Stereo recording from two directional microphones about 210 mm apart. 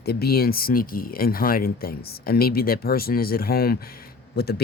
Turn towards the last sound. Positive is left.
turn(degrees=50)  # may be behind; listen again after turning